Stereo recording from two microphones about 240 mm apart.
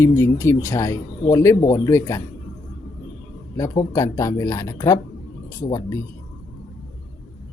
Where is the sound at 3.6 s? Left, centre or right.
Centre.